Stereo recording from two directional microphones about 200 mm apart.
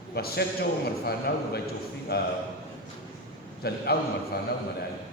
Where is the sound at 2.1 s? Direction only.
55° left (ahead or behind).